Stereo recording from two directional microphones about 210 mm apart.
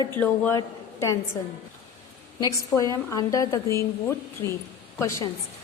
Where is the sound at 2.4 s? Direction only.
15° left (ahead or behind).